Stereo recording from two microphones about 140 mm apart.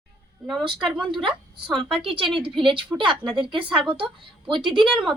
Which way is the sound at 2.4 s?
40° right (ahead or behind).